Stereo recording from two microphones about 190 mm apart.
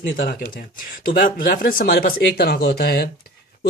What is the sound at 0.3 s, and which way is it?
Speech, 50° left (ahead or behind).